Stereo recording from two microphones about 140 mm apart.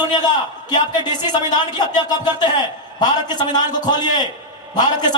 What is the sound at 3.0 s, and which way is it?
A man's voice, 30° left (ahead or behind).